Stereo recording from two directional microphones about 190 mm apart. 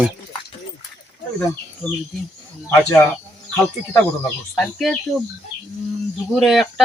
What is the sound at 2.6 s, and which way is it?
Speech, 10° left (ahead or behind).